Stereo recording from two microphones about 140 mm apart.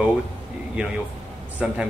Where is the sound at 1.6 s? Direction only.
5° right (ahead or behind).